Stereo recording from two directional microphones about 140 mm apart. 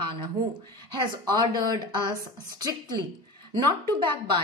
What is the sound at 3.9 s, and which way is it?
Speech, 35° right (ahead or behind).